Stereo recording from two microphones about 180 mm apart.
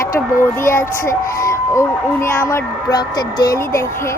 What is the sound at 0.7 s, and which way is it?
A woman's voice, 15° left (ahead or behind).